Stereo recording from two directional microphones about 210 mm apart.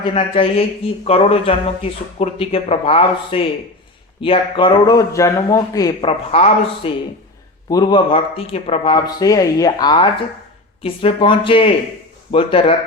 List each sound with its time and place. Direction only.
0.1 s a man's voice: 25° left (ahead or behind)